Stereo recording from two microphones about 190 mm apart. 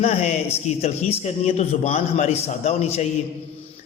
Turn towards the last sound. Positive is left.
turn(degrees=35)  # may be behind; listen again after turning